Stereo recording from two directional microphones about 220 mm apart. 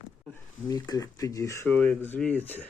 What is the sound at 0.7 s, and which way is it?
Speech, 15° left (ahead or behind).